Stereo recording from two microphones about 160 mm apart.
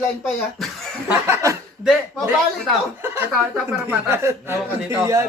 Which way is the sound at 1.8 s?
5° right (ahead or behind).